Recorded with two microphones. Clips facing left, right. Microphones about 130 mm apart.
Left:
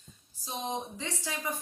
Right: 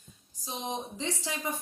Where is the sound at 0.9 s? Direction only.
20° right (ahead or behind).